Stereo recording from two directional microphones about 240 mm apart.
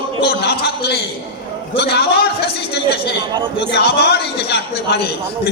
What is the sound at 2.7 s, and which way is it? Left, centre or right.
A woman's voice, left.